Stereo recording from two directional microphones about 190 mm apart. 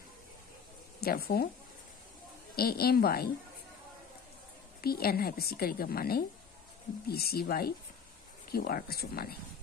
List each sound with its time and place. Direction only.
1.0 s a woman's voice: 55° left (ahead or behind)
2.5 s a woman's voice: 55° left (ahead or behind)
4.8 s a woman's voice: 55° left (ahead or behind)